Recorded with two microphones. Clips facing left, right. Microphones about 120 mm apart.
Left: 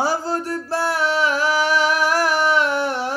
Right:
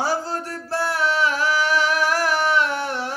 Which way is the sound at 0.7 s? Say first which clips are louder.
Left 1 dB; 5° left (ahead or behind).